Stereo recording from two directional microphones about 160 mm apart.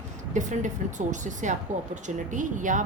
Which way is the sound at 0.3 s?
50° right (ahead or behind).